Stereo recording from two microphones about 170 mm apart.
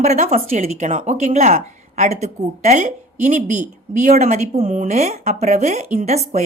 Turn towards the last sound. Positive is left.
turn(degrees=-40)  # may be behind; listen again after turning